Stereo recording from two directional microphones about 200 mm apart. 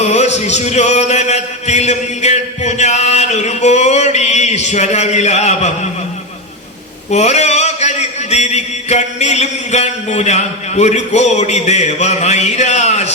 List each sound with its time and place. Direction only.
0.0 s chant: 35° left (ahead or behind)
7.1 s chant: 35° left (ahead or behind)